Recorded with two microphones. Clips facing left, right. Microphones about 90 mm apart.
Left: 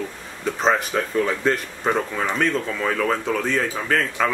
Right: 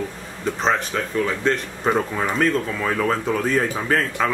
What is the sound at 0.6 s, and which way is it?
Speech, 5° left (ahead or behind).